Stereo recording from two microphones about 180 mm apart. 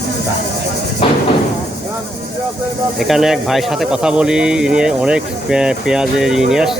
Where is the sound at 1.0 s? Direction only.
30° left (ahead or behind).